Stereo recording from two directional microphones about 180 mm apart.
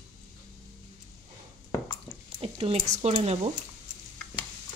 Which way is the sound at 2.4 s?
30° right (ahead or behind).